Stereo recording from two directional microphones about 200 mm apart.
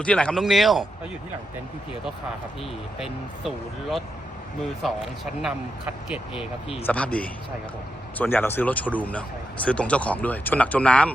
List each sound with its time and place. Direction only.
0.0 s speech: 5° left (ahead or behind)
3.0 s speech: centre (ahead or behind)
6.8 s speech: 5° left (ahead or behind)